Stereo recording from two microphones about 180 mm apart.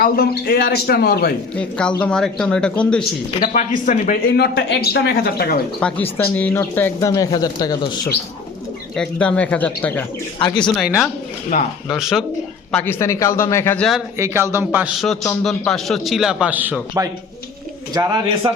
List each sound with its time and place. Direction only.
0.0 s a man's voice: 55° left (ahead or behind)
1.5 s speech: 5° left (ahead or behind)
3.4 s speech: 45° left (ahead or behind)
4.4 s a man's voice: 70° left (ahead or behind)
5.8 s speech: 10° left (ahead or behind)
9.0 s speech: 5° left (ahead or behind)
10.3 s speech: 25° left (ahead or behind)
10.8 s speech: centre (ahead or behind)
11.5 s speech: 50° left (ahead or behind)
11.9 s speech: centre (ahead or behind)
12.7 s speech: 10° left (ahead or behind)
14.2 s a man's voice: 15° right (ahead or behind)
15.4 s speech: centre (ahead or behind)
17.9 s speech: 25° right (ahead or behind)